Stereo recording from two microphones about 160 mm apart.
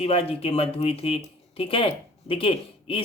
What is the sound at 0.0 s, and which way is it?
Speech, 40° left (ahead or behind).